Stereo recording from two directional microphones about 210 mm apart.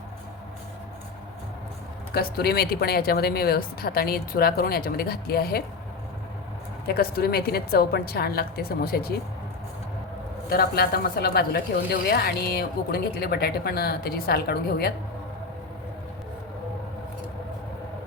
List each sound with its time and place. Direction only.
2.1 s a woman's voice: 50° left (ahead or behind)
6.8 s a woman's voice: 45° left (ahead or behind)
10.5 s a woman's voice: 45° left (ahead or behind)